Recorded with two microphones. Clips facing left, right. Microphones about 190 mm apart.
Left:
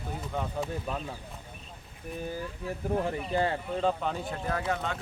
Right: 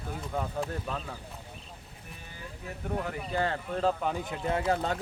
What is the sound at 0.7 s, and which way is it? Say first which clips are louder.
Speech: left 1 dB; 10° left (ahead or behind).